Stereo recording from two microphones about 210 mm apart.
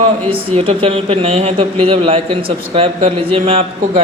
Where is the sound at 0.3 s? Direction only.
25° right (ahead or behind).